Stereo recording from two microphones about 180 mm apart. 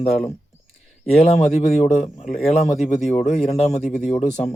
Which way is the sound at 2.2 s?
45° left (ahead or behind).